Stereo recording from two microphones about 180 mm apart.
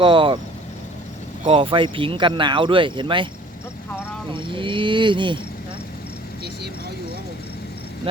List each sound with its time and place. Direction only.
0.0 s speech: 30° right (ahead or behind)
1.5 s speech: 30° right (ahead or behind)
4.3 s a sound: 25° right (ahead or behind)